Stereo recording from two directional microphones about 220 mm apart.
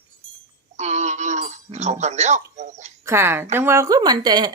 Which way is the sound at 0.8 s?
30° right (ahead or behind).